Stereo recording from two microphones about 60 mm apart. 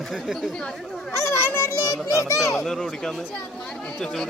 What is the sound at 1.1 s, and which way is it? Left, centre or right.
Speech, left.